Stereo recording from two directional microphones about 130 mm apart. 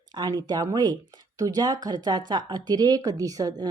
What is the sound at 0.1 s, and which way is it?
Speech, 30° right (ahead or behind).